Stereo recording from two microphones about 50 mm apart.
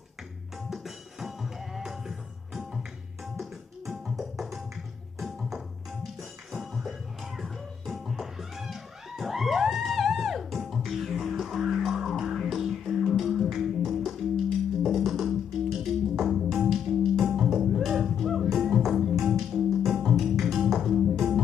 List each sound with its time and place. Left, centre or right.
0.7 s music: centre